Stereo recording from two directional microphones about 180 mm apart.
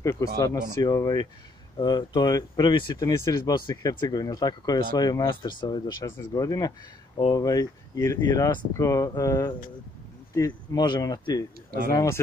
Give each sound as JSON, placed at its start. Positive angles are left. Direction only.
{"t": 0.0, "sound": "speech", "side_deg": 15}